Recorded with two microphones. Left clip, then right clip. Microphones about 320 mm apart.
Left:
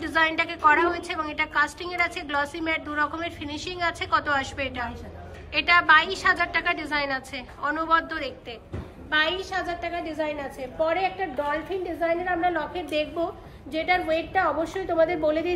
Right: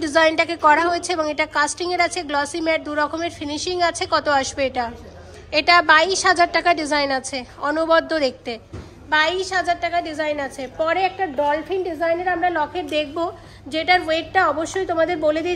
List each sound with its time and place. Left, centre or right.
0.0 s a woman's voice: centre; by 15.5 s right